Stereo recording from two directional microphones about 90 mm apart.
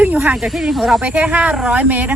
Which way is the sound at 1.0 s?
15° right (ahead or behind).